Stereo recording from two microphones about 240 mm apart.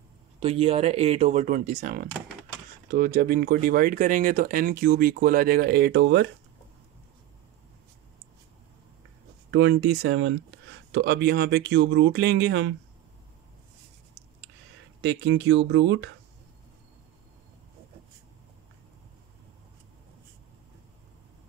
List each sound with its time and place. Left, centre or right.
0.4 s speech: right
9.5 s speech: right
15.0 s speech: right